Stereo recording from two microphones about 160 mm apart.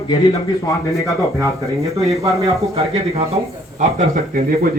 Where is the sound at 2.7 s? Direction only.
40° right (ahead or behind).